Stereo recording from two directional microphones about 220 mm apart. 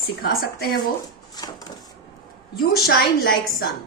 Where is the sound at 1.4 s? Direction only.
20° left (ahead or behind).